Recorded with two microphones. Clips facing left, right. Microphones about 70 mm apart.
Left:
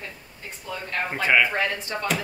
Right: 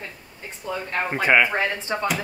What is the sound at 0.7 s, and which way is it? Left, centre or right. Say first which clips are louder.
Speech: right 3 dB; centre.